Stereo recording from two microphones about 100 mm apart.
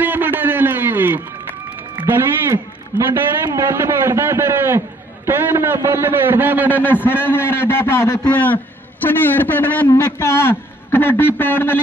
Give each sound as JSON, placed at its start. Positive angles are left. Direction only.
{"t": 0.0, "sound": "a sound", "side_deg": -20}
{"t": 2.0, "sound": "a man's voice", "side_deg": -25}
{"t": 6.8, "sound": "a man's voice", "side_deg": 20}
{"t": 8.3, "sound": "a man's voice", "side_deg": 15}
{"t": 9.8, "sound": "a man's voice", "side_deg": 40}